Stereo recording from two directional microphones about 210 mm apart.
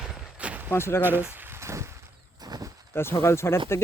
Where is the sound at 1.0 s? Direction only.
10° right (ahead or behind).